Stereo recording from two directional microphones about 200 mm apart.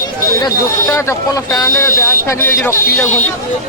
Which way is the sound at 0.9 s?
15° left (ahead or behind).